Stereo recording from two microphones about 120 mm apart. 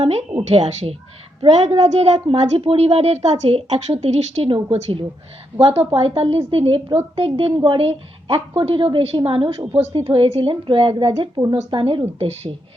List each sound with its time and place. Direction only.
0.0 s a woman's voice: 60° right (ahead or behind)
4.5 s a woman's voice: 45° right (ahead or behind)
9.7 s a woman's voice: 55° right (ahead or behind)